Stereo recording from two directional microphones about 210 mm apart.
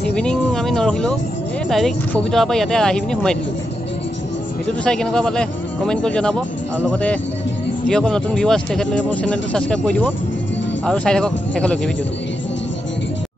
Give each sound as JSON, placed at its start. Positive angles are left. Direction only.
{"t": 0.1, "sound": "a sound", "side_deg": 5}
{"t": 1.7, "sound": "speech", "side_deg": 0}
{"t": 4.8, "sound": "speech", "side_deg": 5}